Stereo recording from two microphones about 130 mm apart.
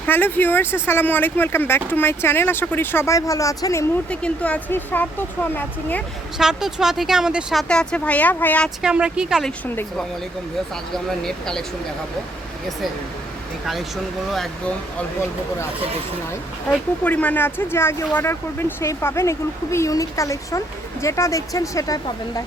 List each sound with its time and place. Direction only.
0.0 s speech: 15° left (ahead or behind)
4.1 s speech: 10° left (ahead or behind)
6.4 s speech: 5° right (ahead or behind)
7.7 s speech: 5° left (ahead or behind)
8.8 s speech: 5° right (ahead or behind)
10.9 s speech: 5° left (ahead or behind)
13.7 s speech: centre (ahead or behind)
17.0 s speech: 10° left (ahead or behind); by 22.4 s 25° left (ahead or behind)